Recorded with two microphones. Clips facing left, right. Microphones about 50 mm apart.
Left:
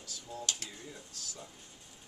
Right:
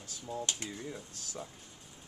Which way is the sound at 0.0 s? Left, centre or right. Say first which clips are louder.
Right 3 dB; right.